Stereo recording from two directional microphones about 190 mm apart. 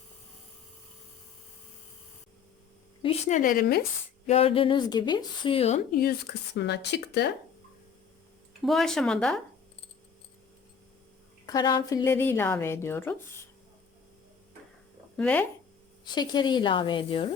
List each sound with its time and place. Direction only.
3.0 s a woman's voice: 35° left (ahead or behind); by 3.8 s 50° left (ahead or behind)
4.3 s a woman's voice: 30° left (ahead or behind)
5.9 s speech: 55° left (ahead or behind)
8.6 s speech: centre (ahead or behind)
11.4 s a woman's voice: 20° left (ahead or behind)
15.1 s speech: 5° left (ahead or behind)
16.0 s a woman's voice: 25° left (ahead or behind)